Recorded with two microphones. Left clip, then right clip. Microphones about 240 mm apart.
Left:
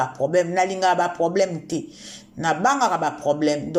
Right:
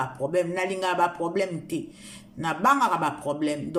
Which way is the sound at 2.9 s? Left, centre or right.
Centre.